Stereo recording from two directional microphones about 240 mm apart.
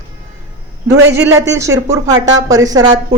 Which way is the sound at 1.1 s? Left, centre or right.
Centre.